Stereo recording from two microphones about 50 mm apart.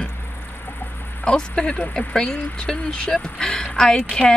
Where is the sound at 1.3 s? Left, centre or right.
Centre.